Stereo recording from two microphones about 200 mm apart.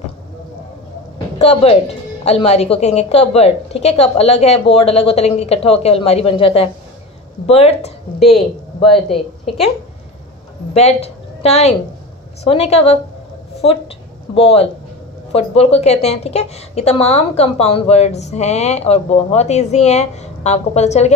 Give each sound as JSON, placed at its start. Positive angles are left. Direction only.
{"t": 1.4, "sound": "a woman's voice", "side_deg": 30}
{"t": 10.7, "sound": "a woman's voice", "side_deg": 30}
{"t": 14.3, "sound": "a woman's voice", "side_deg": 30}